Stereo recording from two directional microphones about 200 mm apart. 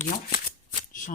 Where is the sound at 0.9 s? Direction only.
45° left (ahead or behind).